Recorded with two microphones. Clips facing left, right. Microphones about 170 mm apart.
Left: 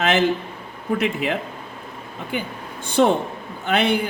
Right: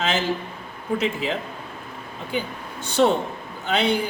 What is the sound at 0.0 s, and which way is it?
A woman's voice, 60° left (ahead or behind).